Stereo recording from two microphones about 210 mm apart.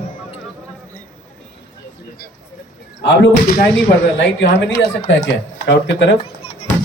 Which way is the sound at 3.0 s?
50° left (ahead or behind).